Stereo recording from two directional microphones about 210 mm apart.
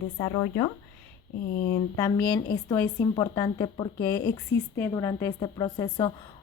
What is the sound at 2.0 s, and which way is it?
A woman's voice, 20° left (ahead or behind).